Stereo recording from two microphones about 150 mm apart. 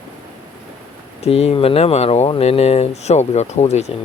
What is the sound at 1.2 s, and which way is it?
Speech, 45° left (ahead or behind).